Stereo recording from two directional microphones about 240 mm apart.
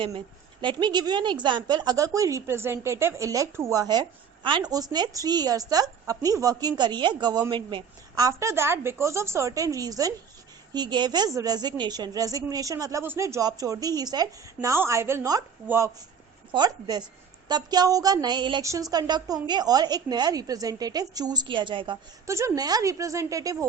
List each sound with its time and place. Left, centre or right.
0.6 s speech: centre